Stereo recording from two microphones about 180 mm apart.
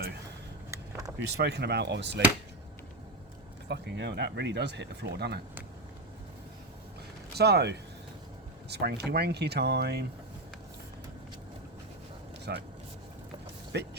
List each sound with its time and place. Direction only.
0.7 s a sound: 20° right (ahead or behind)
1.4 s speech: 70° right (ahead or behind)
3.7 s speech: 70° right (ahead or behind)
7.3 s speech: 65° right (ahead or behind)
12.5 s speech: 65° right (ahead or behind)
13.7 s speech: 70° right (ahead or behind)